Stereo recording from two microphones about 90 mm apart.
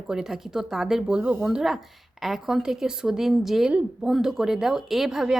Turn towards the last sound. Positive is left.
turn(degrees=-5)  # may be behind; listen again after turning